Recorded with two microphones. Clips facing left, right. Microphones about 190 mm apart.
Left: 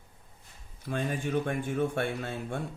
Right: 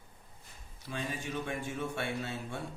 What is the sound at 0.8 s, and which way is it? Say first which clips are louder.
Speech: left 6 dB; 55° left (ahead or behind).